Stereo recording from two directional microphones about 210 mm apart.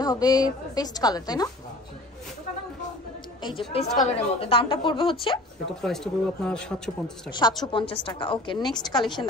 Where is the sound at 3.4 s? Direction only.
25° left (ahead or behind).